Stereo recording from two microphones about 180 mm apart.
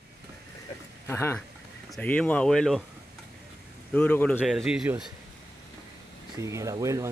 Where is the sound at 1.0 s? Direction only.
15° left (ahead or behind).